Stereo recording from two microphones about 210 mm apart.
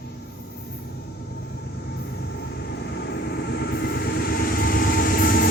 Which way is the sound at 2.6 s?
50° left (ahead or behind).